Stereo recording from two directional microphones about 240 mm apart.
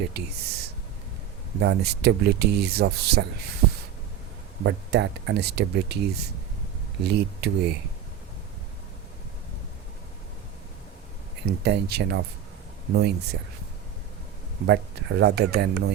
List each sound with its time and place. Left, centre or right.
0.1 s speech: right
4.6 s speech: right
11.6 s speech: right
14.7 s speech: right